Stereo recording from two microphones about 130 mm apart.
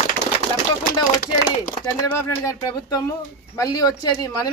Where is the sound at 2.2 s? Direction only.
25° left (ahead or behind).